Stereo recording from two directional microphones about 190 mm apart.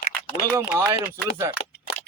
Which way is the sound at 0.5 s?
10° right (ahead or behind).